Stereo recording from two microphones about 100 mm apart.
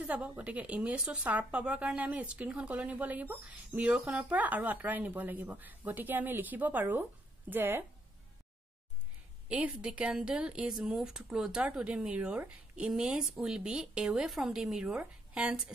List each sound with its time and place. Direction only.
0.0 s speech: 15° right (ahead or behind)
9.5 s speech: 10° right (ahead or behind)